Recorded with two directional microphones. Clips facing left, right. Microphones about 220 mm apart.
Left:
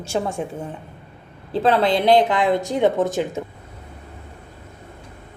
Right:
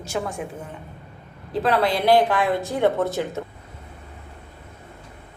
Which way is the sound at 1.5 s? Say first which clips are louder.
Left 3 dB; 25° left (ahead or behind).